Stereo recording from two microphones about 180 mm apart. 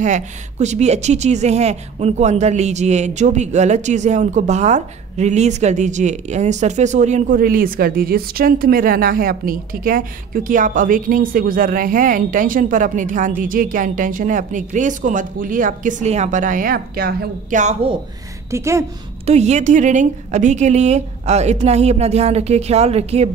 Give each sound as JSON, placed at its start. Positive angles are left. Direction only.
{"t": 0.0, "sound": "a woman's voice", "side_deg": -40}
{"t": 17.6, "sound": "a woman's voice", "side_deg": -40}
{"t": 18.5, "sound": "a woman's voice", "side_deg": -15}
{"t": 19.2, "sound": "a woman's voice", "side_deg": -40}